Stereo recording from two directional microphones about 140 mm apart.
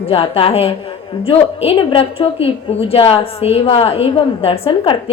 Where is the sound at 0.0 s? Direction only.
40° left (ahead or behind).